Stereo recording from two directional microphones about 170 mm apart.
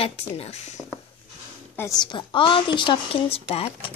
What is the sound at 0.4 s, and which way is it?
Speech, 40° left (ahead or behind).